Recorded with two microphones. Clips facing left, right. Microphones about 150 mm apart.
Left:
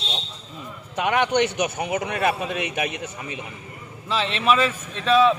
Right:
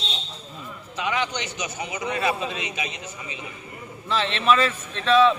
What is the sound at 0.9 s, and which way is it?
A man's voice, 60° left (ahead or behind).